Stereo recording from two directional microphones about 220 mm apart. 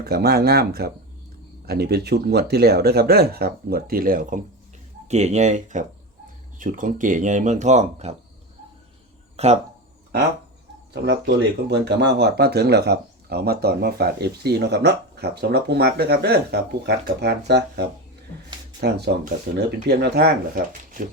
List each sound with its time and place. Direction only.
0.0 s speech: 45° right (ahead or behind); by 8.1 s 30° right (ahead or behind)
9.3 s a sound: 30° right (ahead or behind)
10.9 s speech: 50° right (ahead or behind)